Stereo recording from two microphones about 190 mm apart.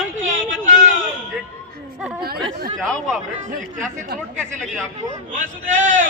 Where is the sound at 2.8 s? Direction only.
5° left (ahead or behind).